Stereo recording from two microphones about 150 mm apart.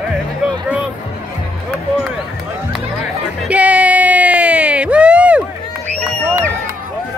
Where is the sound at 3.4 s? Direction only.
10° right (ahead or behind).